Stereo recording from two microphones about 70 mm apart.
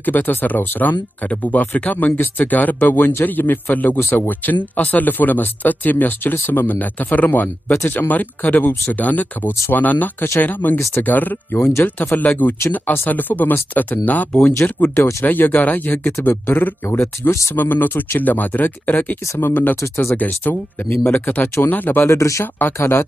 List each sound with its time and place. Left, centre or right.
0.0 s speech: left
20.2 s speech: left
22.1 s speech: left